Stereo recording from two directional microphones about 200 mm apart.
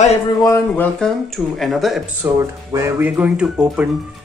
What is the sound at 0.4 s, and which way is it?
Speech, 15° left (ahead or behind).